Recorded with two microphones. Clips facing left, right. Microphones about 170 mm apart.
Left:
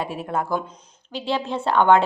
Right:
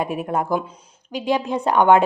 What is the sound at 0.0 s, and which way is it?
A woman's voice, 15° right (ahead or behind).